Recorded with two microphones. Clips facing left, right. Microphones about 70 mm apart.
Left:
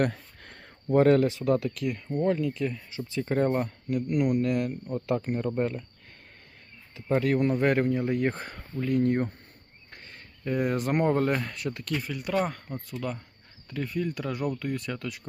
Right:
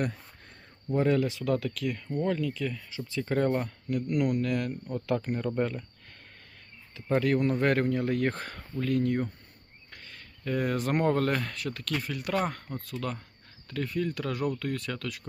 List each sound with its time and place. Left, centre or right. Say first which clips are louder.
0.0 s a sound: left 5 dB; left
1.5 s speech: left 2 dB; centre
5.5 s speech: even; centre
7.3 s speech: left 2 dB; centre
9.0 s speech: left 3 dB; left
9.9 s a sound: left 1 dB; left
10.4 s speech: left 2 dB; centre
11.9 s speech: left 1 dB; centre